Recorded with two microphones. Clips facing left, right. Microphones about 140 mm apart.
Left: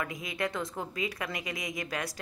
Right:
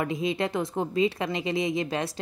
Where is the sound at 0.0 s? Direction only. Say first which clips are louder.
Right 7 dB; 25° right (ahead or behind).